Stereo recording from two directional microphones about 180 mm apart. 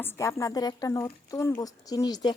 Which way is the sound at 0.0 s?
15° left (ahead or behind).